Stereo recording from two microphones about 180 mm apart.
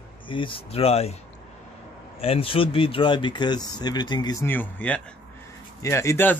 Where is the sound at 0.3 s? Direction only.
30° left (ahead or behind).